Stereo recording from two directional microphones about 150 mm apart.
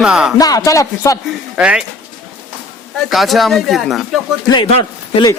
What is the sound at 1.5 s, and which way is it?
Speech, 5° right (ahead or behind).